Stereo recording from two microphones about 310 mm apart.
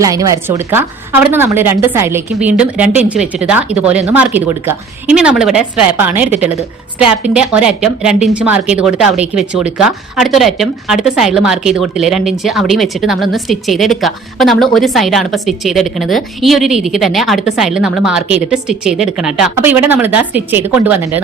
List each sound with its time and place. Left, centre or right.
0.0 s speech: centre